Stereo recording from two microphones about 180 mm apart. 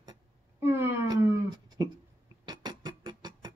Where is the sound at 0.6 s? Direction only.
10° right (ahead or behind).